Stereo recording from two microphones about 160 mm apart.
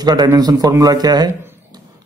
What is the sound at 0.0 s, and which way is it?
A man's voice, 25° right (ahead or behind).